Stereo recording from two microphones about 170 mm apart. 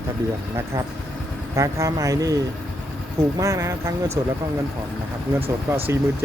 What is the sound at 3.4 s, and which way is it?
Speech, 20° right (ahead or behind).